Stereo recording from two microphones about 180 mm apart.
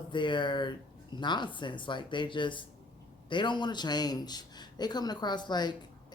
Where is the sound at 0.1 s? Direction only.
25° left (ahead or behind).